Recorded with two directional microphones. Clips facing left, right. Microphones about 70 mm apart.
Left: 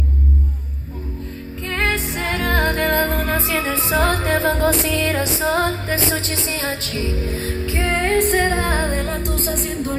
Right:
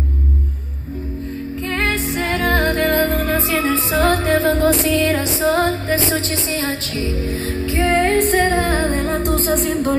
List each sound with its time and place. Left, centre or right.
1.7 s music: centre
9.2 s music: right